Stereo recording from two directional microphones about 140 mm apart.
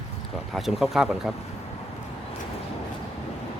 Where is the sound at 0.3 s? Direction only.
Centre (ahead or behind).